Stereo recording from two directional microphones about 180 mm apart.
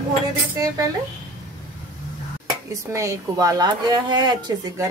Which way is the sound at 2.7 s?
15° right (ahead or behind).